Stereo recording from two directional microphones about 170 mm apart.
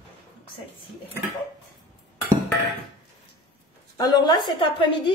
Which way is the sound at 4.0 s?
25° left (ahead or behind).